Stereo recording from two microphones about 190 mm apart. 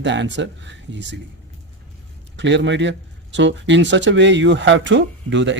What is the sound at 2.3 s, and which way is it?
Speech, 70° right (ahead or behind).